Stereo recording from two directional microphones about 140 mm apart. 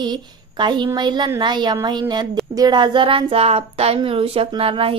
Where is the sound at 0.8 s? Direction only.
30° right (ahead or behind).